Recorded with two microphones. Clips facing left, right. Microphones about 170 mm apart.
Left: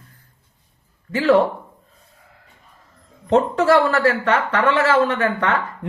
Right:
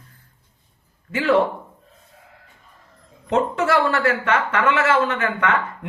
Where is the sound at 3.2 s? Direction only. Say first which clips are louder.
Left 4 dB; 35° left (ahead or behind).